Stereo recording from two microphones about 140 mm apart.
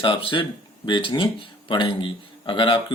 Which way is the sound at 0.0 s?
40° left (ahead or behind).